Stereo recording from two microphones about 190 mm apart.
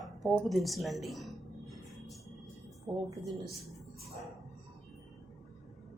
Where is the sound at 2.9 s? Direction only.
20° right (ahead or behind).